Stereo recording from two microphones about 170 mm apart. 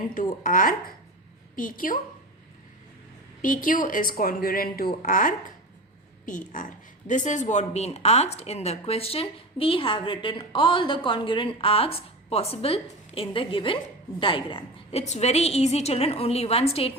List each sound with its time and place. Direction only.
0.1 s speech: 50° left (ahead or behind)
3.4 s speech: 50° left (ahead or behind)
7.1 s speech: 45° left (ahead or behind)